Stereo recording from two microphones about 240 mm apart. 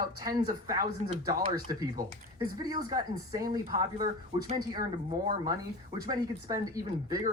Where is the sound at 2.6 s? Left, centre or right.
Centre.